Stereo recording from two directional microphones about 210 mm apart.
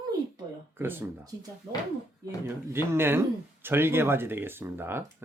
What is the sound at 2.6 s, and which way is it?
Speech, 10° right (ahead or behind).